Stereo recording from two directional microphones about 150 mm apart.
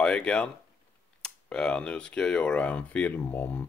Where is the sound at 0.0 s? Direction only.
5° left (ahead or behind).